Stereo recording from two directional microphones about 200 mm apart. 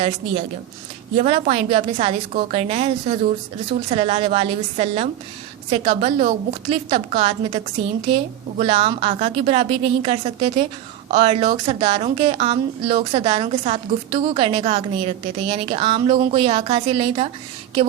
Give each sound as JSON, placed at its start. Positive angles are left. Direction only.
{"t": 1.1, "sound": "a woman's voice", "side_deg": -30}